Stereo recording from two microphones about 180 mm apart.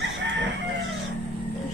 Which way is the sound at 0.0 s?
90° right.